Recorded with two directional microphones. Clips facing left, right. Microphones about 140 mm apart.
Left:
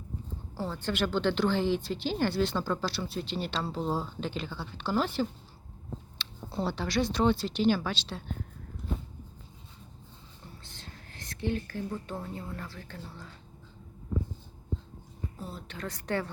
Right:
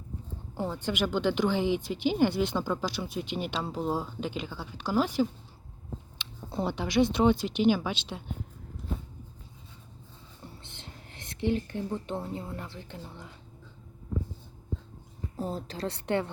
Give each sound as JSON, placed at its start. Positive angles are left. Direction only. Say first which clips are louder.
{"t": 0.5, "sound": "a woman's voice", "louder": "right 2 dB", "side_deg": -15}
{"t": 6.5, "sound": "a woman's voice", "louder": "right 2 dB", "side_deg": -15}
{"t": 10.6, "sound": "speech", "louder": "right 1 dB", "side_deg": -20}
{"t": 15.4, "sound": "a woman's voice", "louder": "right 9 dB", "side_deg": -40}